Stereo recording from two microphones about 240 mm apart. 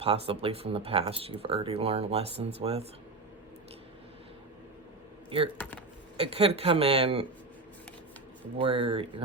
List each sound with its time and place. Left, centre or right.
0.0 s speech: right
5.3 s speech: right
8.5 s speech: right